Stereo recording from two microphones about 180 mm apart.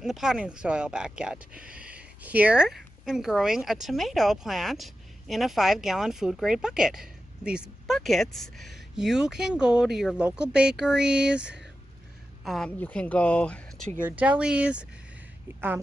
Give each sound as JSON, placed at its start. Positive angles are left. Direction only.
{"t": 0.0, "sound": "speech", "side_deg": 0}
{"t": 14.0, "sound": "speech", "side_deg": -10}